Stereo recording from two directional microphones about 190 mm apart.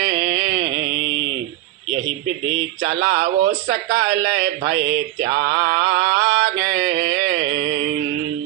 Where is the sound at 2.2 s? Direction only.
90° right.